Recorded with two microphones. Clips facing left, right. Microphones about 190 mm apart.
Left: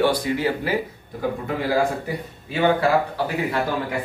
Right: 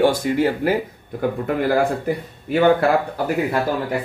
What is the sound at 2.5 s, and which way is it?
Speech, 50° right (ahead or behind).